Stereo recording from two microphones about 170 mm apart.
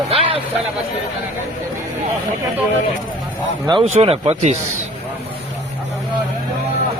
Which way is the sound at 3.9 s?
35° right (ahead or behind).